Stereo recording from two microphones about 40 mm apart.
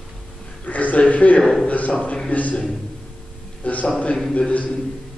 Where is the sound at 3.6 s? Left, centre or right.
Left.